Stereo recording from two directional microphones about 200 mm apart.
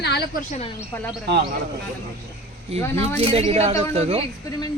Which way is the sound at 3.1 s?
30° right (ahead or behind).